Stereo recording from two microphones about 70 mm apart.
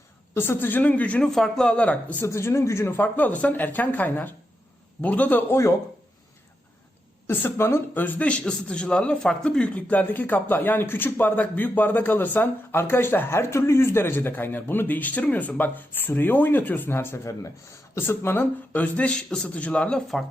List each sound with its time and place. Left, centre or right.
0.3 s speech: left
1.2 s speech: centre
2.2 s speech: left
3.0 s speech: left
7.3 s speech: left; by 20.1 s centre